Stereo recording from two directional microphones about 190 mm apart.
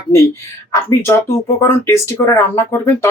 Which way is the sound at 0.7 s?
15° left (ahead or behind).